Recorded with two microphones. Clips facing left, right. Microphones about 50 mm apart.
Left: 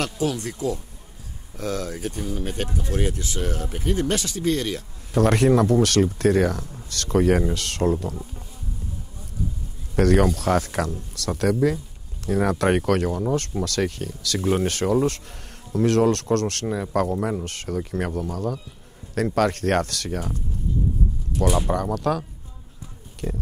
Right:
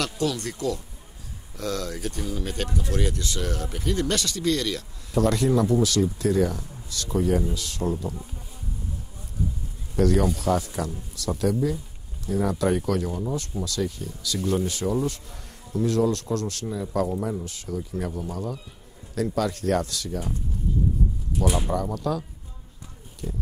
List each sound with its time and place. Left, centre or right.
0.0 s speech: left
0.4 s speech: centre
1.6 s speech: centre
5.1 s speech: left
9.9 s speech: left
21.6 s speech: left
23.2 s speech: left